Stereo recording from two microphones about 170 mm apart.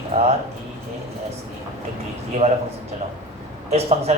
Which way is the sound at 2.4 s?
40° right (ahead or behind).